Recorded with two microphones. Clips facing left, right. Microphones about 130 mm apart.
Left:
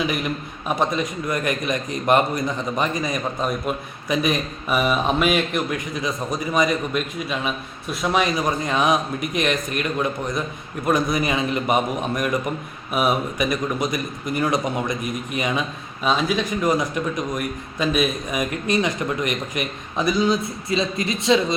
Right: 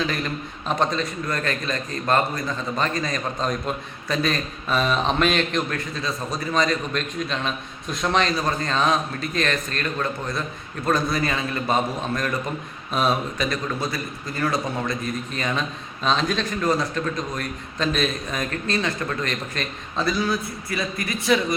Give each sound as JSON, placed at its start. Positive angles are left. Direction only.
{"t": 0.0, "sound": "a man's voice", "side_deg": 15}